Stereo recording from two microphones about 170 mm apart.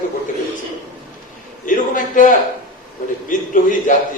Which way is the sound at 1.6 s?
50° left (ahead or behind).